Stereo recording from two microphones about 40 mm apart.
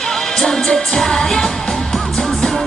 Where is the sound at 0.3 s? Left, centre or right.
Centre.